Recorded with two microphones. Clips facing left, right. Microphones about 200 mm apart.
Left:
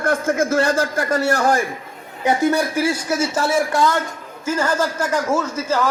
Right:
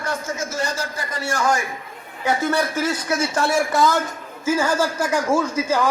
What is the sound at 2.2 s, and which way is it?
Speech, 15° left (ahead or behind).